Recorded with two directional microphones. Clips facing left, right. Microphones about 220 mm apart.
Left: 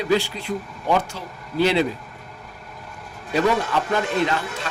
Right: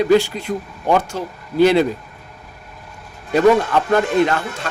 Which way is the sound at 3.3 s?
50° right (ahead or behind).